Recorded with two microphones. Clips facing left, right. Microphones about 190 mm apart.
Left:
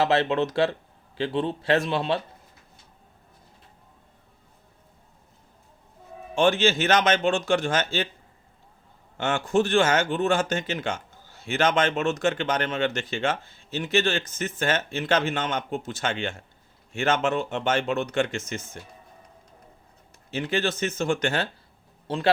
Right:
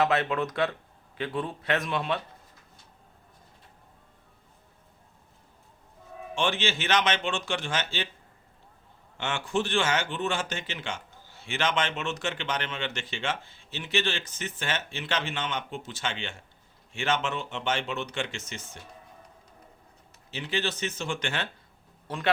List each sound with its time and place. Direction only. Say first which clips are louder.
0.0 s a man's voice: left 3 dB; 30° left (ahead or behind)
6.3 s speech: left 8 dB; 45° left (ahead or behind)
9.1 s speech: left 6 dB; 45° left (ahead or behind)
20.3 s a man's voice: left 5 dB; 45° left (ahead or behind); by 22.3 s 30° left (ahead or behind)